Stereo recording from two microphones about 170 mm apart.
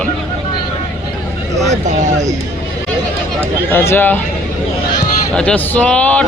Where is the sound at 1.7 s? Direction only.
45° right (ahead or behind).